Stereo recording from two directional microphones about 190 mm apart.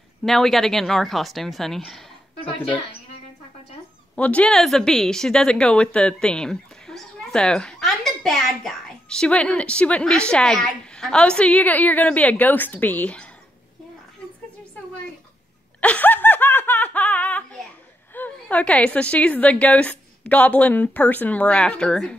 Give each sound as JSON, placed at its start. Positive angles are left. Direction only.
{"t": 0.2, "sound": "speech", "side_deg": 0}
{"t": 4.1, "sound": "speech", "side_deg": 5}
{"t": 15.8, "sound": "laughter", "side_deg": 5}
{"t": 18.1, "sound": "a woman's voice", "side_deg": 10}